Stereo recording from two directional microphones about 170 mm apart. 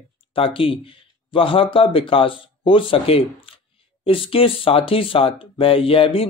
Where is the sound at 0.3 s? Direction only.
30° left (ahead or behind).